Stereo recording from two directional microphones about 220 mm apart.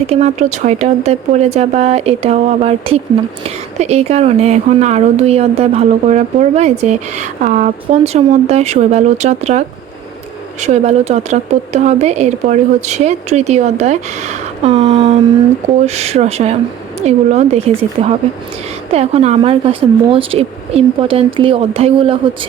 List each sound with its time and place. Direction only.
0.1 s speech: 30° right (ahead or behind)